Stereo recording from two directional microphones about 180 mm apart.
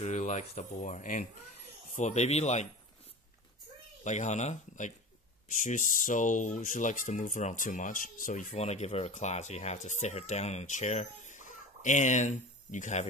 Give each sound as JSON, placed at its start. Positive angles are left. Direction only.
{"t": 0.0, "sound": "speech", "side_deg": 40}
{"t": 4.0, "sound": "speech", "side_deg": 40}